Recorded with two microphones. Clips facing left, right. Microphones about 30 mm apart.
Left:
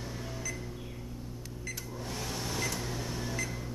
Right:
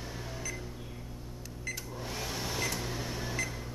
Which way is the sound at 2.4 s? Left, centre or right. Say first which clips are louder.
Even; centre.